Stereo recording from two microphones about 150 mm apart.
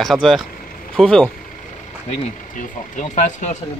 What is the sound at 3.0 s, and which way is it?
Speech, 55° left (ahead or behind).